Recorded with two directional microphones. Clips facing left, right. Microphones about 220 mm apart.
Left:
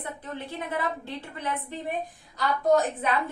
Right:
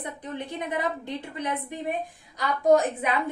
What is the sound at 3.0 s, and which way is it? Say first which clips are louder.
Speech: even; 15° right (ahead or behind).